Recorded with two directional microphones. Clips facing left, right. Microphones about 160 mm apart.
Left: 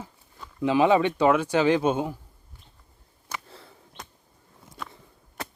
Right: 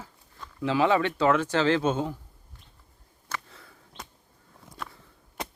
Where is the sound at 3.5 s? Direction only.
30° left (ahead or behind).